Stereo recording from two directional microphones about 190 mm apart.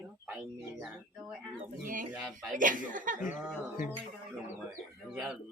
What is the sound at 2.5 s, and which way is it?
Speech, 45° right (ahead or behind).